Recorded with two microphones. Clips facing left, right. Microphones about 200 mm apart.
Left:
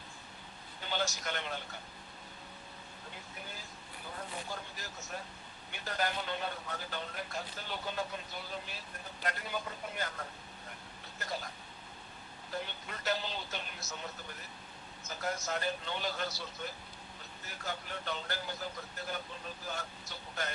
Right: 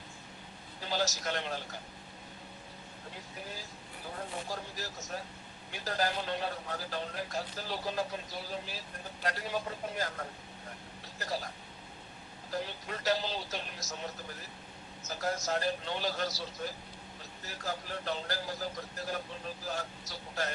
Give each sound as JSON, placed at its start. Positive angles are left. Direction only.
{"t": 0.8, "sound": "a man's voice", "side_deg": -35}
{"t": 4.4, "sound": "a man's voice", "side_deg": -35}
{"t": 11.2, "sound": "a man's voice", "side_deg": -35}
{"t": 12.5, "sound": "a man's voice", "side_deg": -35}